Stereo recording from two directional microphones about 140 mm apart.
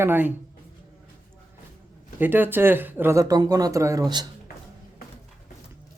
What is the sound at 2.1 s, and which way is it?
Speech, 15° right (ahead or behind).